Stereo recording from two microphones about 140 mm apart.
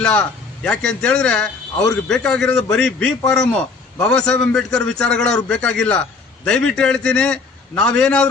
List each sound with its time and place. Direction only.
0.0 s a man's voice: 10° left (ahead or behind)